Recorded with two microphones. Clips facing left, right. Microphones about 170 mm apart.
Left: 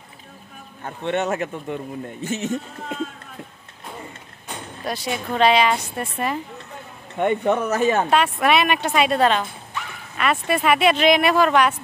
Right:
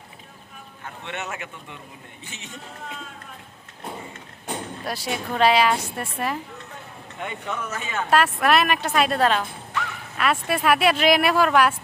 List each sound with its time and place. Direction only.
0.8 s a man's voice: 35° left (ahead or behind)
4.8 s speech: 5° right (ahead or behind)
7.2 s speech: 60° left (ahead or behind)
8.1 s speech: centre (ahead or behind)